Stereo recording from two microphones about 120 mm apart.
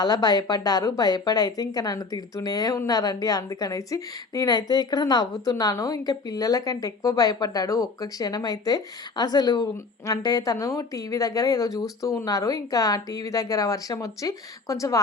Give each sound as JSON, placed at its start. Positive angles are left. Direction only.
{"t": 0.0, "sound": "a woman's voice", "side_deg": 35}